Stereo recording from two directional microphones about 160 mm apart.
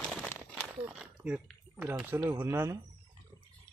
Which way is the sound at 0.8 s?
5° right (ahead or behind).